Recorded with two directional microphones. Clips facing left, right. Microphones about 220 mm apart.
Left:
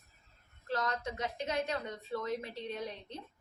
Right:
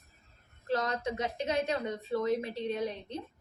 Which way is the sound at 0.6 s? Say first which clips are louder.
Right 4 dB; 25° right (ahead or behind).